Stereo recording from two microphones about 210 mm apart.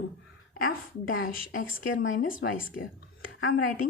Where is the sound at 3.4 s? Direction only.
70° left (ahead or behind).